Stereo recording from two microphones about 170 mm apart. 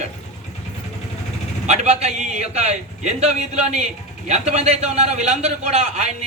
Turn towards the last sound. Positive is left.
turn(degrees=-40)  # may be behind; listen again after turning